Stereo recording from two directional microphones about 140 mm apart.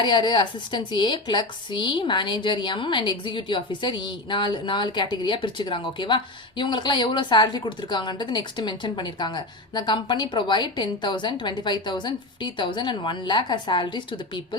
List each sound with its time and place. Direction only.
0.0 s a woman's voice: 35° left (ahead or behind)